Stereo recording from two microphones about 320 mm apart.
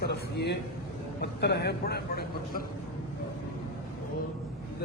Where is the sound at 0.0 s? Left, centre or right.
Left.